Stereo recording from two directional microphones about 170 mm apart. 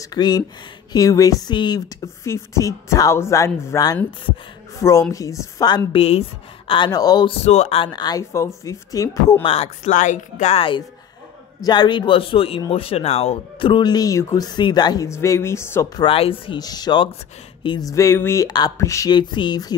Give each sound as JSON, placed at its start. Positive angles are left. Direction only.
{"t": 0.0, "sound": "a woman's voice", "side_deg": 25}
{"t": 5.9, "sound": "a woman's voice", "side_deg": 35}
{"t": 7.4, "sound": "speech", "side_deg": 40}
{"t": 9.8, "sound": "speech", "side_deg": 45}
{"t": 16.0, "sound": "speech", "side_deg": 35}